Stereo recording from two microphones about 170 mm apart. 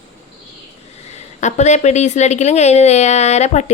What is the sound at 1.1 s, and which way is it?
Speech, 45° left (ahead or behind).